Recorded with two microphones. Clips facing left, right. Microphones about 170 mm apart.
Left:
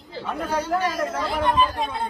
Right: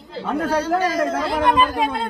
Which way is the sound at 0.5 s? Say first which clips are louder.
Right 3 dB; 75° right (ahead or behind).